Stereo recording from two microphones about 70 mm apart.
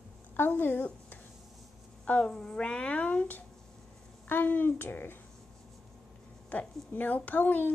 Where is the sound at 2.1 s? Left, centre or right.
Centre; by 5.1 s left.